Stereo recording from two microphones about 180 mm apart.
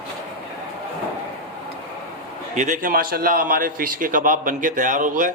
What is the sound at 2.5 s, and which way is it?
A man's voice, 45° right (ahead or behind).